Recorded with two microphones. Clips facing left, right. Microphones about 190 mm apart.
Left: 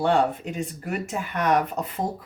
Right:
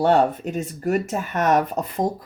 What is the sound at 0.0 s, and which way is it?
Speech, 40° right (ahead or behind).